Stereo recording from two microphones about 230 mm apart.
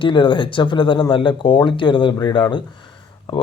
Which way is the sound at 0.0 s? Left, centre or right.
Left.